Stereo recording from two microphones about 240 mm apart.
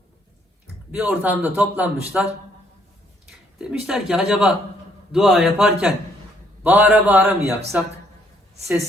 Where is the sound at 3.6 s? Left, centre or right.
Centre.